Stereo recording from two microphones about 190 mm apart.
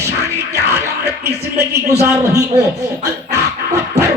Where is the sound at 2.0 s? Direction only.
15° right (ahead or behind).